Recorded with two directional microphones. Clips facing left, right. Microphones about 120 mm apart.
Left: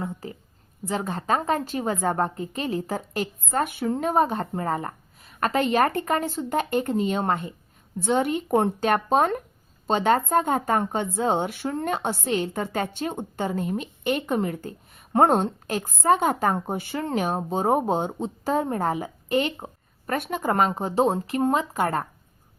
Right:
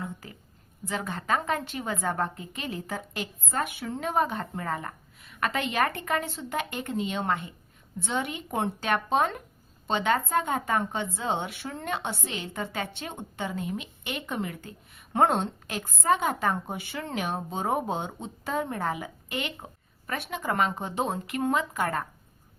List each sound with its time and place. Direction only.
0.0 s a woman's voice: 30° left (ahead or behind)